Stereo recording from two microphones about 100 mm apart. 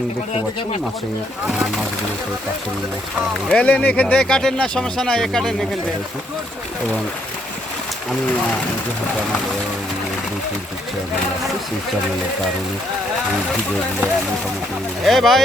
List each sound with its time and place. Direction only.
3.5 s speech: 15° left (ahead or behind)
15.0 s speech: centre (ahead or behind)